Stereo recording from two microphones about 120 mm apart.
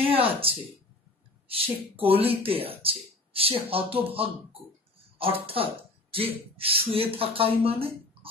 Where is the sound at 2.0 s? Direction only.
55° right (ahead or behind).